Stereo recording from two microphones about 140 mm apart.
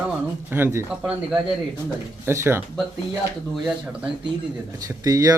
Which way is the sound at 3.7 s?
5° right (ahead or behind).